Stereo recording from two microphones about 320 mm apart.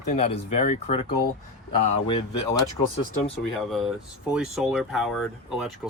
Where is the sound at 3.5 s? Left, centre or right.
Centre.